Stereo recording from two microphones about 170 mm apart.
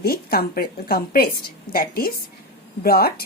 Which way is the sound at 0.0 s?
65° left (ahead or behind).